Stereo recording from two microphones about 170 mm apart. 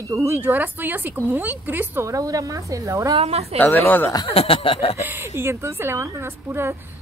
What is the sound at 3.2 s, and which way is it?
Speech, 35° right (ahead or behind).